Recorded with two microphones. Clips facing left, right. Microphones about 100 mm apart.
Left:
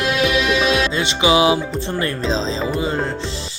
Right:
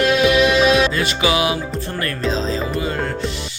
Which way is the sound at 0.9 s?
20° left (ahead or behind).